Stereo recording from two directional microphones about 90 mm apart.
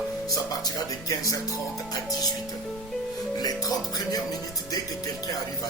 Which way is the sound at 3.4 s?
45° left (ahead or behind).